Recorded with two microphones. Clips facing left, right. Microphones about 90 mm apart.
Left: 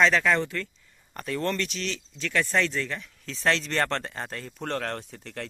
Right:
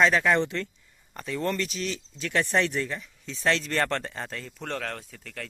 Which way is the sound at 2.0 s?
25° right (ahead or behind).